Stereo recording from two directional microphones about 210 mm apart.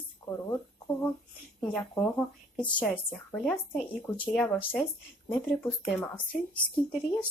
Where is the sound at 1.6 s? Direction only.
Centre (ahead or behind).